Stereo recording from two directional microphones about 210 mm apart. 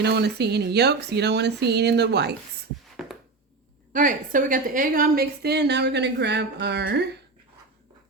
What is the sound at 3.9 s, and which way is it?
Speech, 40° right (ahead or behind).